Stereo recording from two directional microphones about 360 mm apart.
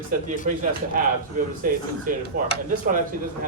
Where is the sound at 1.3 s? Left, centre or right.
Right.